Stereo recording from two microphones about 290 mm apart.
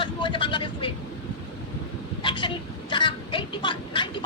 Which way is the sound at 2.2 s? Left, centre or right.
Centre.